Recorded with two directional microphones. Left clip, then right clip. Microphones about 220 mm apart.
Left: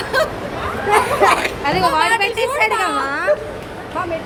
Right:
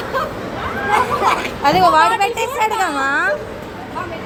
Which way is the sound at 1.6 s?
25° right (ahead or behind).